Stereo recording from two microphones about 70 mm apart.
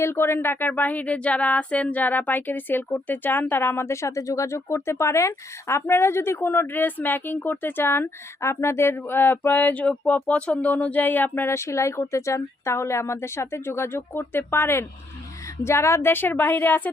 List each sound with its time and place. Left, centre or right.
0.0 s speech: left
9.8 s speech: centre